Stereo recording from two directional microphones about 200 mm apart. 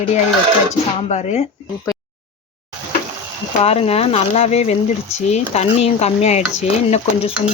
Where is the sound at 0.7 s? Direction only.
35° left (ahead or behind).